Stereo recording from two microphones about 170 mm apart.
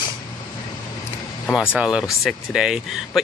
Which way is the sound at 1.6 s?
5° right (ahead or behind).